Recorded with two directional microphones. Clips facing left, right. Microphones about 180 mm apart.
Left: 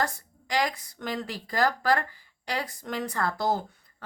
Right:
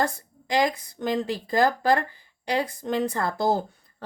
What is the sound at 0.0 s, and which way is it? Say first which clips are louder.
Speech: right 4 dB; 25° right (ahead or behind).